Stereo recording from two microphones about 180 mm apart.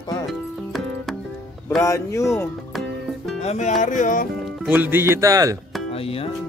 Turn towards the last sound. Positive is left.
turn(degrees=30)  # may be behind; listen again after turning